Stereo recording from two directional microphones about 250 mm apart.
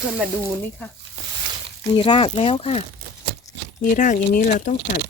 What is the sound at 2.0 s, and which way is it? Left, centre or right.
Speech, left.